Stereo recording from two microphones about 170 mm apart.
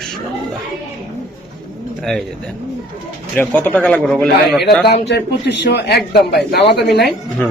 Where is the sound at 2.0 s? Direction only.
Centre (ahead or behind).